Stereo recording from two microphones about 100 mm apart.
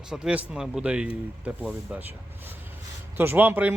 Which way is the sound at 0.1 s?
10° right (ahead or behind).